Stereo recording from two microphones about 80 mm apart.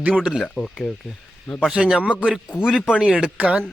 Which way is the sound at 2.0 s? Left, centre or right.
Centre.